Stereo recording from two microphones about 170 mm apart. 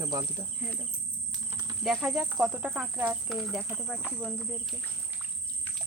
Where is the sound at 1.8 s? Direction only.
Centre (ahead or behind).